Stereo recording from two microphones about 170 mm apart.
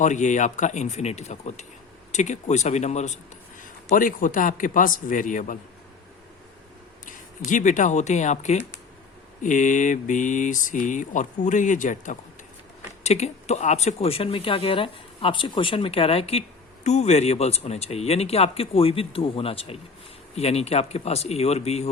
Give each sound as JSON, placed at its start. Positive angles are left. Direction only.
{"t": 0.0, "sound": "speech", "side_deg": 45}
{"t": 7.0, "sound": "speech", "side_deg": 50}